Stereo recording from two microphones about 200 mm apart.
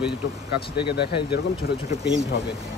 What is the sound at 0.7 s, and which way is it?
Speech, 55° left (ahead or behind).